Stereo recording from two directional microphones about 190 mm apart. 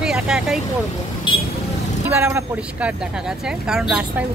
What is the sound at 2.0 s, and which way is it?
Speech, 10° right (ahead or behind).